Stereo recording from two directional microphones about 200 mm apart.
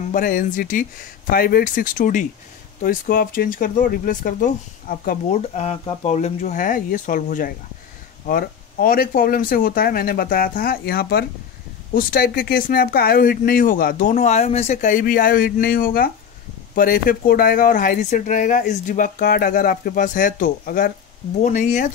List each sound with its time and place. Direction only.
0.1 s speech: 45° left (ahead or behind)